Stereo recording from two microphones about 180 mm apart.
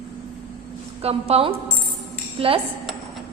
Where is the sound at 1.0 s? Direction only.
35° right (ahead or behind).